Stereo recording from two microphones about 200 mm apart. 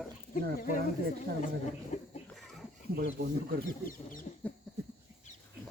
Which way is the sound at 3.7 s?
45° left (ahead or behind).